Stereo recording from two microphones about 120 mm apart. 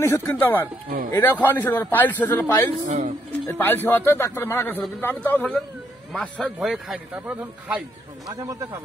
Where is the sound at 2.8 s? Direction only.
65° right (ahead or behind).